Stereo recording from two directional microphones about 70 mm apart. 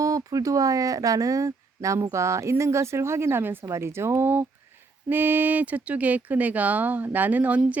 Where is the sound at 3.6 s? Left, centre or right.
Right.